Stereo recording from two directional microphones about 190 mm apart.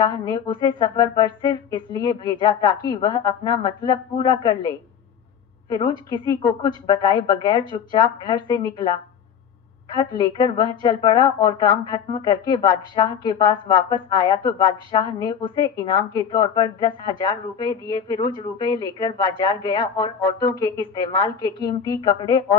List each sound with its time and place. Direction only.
0.0 s a woman's voice: 20° left (ahead or behind)